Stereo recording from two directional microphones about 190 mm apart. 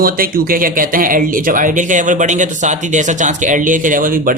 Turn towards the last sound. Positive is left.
turn(degrees=-45)  # may be behind; listen again after turning